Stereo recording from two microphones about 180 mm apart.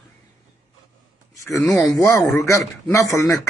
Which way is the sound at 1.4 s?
15° left (ahead or behind).